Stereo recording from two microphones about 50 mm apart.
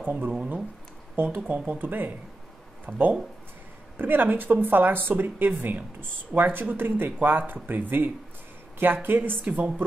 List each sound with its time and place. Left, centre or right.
0.0 s speech: right
2.9 s speech: right
3.9 s speech: right